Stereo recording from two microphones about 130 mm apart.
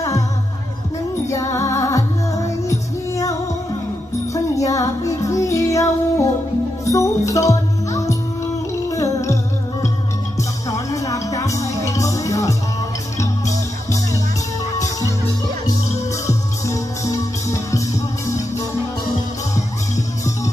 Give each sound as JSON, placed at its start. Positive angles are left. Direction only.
{"t": 1.3, "sound": "music", "side_deg": 25}
{"t": 4.5, "sound": "music", "side_deg": 25}
{"t": 10.7, "sound": "music", "side_deg": 25}
{"t": 16.2, "sound": "music", "side_deg": 25}